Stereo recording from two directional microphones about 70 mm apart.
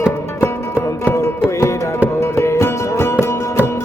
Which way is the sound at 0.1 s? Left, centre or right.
Left.